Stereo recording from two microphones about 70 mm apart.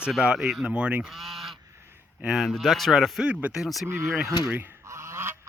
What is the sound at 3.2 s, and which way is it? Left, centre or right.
Speech, centre.